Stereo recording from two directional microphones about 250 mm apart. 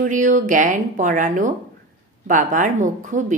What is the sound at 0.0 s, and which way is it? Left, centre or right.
A woman's voice, right.